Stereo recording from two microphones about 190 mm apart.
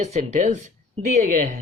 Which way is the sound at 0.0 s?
40° right (ahead or behind).